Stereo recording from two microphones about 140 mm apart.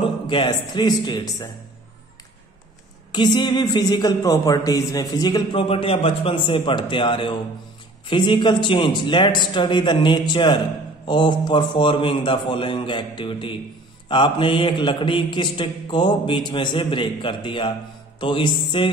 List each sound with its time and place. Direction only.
0.0 s speech: 35° left (ahead or behind)
3.1 s speech: 30° left (ahead or behind)